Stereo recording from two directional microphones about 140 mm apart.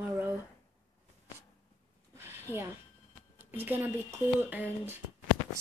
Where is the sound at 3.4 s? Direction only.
15° right (ahead or behind).